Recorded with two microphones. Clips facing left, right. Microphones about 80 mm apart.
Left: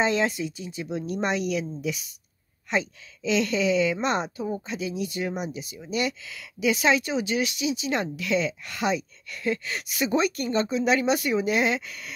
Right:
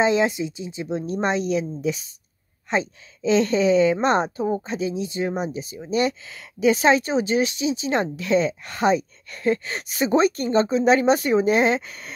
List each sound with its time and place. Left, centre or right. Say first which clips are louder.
0.0 s a woman's voice: right 4 dB; centre